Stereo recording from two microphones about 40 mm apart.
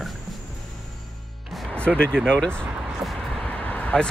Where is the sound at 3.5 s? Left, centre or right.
Left.